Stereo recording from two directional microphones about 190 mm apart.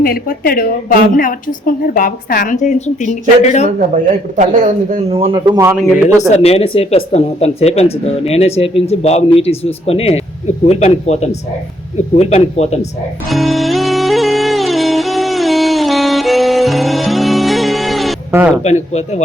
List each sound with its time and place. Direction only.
0.0 s a woman's voice: 50° left (ahead or behind)
3.8 s a man's voice: 40° right (ahead or behind); by 5.7 s 20° right (ahead or behind)
5.8 s speech: 5° right (ahead or behind)
6.2 s speech: 35° left (ahead or behind)
13.3 s music: centre (ahead or behind)
18.6 s speech: 35° left (ahead or behind)